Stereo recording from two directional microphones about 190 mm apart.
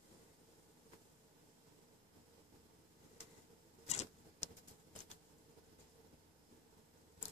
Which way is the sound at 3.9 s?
35° left (ahead or behind).